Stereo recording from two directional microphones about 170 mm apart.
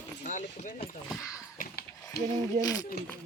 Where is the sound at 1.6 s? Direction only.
65° left (ahead or behind).